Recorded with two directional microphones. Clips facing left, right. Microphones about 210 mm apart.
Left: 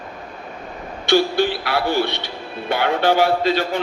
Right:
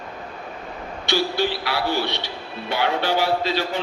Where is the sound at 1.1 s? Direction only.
50° left (ahead or behind).